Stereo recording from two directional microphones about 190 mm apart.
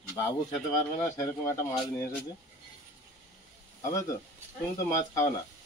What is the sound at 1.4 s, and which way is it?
Speech, 20° left (ahead or behind).